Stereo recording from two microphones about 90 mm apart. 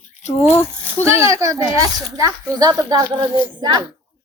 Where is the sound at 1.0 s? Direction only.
30° right (ahead or behind).